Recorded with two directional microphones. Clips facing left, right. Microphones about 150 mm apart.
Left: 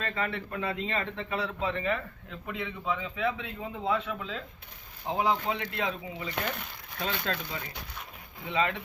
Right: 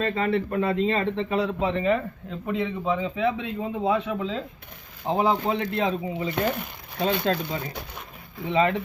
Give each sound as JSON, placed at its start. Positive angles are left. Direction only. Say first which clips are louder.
{"t": 0.0, "sound": "a man's voice", "louder": "right 9 dB", "side_deg": -30}